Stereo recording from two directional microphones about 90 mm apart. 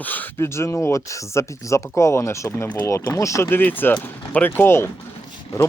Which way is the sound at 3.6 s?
20° left (ahead or behind).